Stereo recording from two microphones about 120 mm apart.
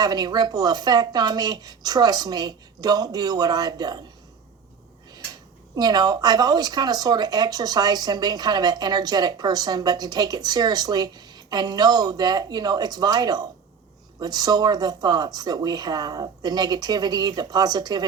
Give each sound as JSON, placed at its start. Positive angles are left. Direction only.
{"t": 0.0, "sound": "speech", "side_deg": -35}
{"t": 5.7, "sound": "speech", "side_deg": -35}